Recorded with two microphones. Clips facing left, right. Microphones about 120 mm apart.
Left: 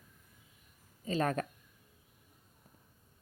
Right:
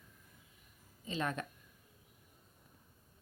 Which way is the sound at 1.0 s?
40° left (ahead or behind).